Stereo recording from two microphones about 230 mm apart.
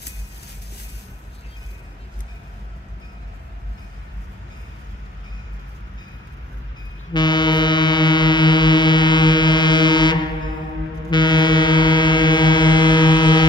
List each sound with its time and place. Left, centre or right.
7.1 s music: centre
11.1 s ship: centre